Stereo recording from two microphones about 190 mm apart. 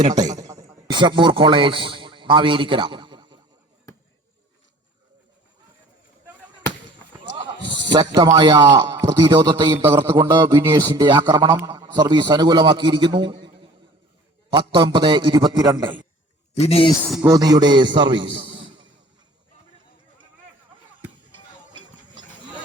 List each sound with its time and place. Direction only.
0.0 s a man's voice: 20° right (ahead or behind)
7.3 s horse: 25° right (ahead or behind)
7.9 s a man's voice: 25° right (ahead or behind)
14.5 s a man's voice: 25° right (ahead or behind)
16.6 s speech: 30° left (ahead or behind)
17.2 s a man's voice: 20° right (ahead or behind)
21.7 s a sound: 25° right (ahead or behind)